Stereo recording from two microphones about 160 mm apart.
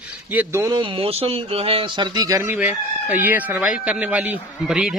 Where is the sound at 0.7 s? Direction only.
35° right (ahead or behind).